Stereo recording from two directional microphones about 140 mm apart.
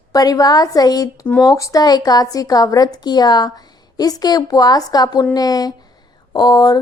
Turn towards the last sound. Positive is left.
turn(degrees=30)  # may be behind; listen again after turning